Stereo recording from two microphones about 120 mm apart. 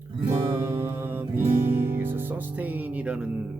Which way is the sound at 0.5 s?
15° right (ahead or behind).